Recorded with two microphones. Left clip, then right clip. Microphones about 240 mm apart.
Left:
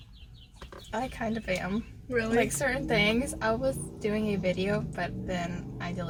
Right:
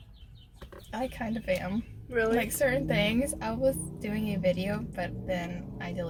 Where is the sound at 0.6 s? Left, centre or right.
Centre.